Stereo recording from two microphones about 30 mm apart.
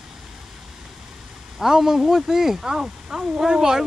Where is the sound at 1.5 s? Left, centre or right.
Centre.